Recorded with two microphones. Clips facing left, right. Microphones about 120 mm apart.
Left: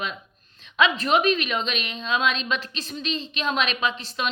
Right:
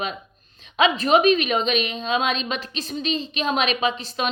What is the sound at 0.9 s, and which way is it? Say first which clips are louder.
A woman's voice: right 4 dB; 15° right (ahead or behind).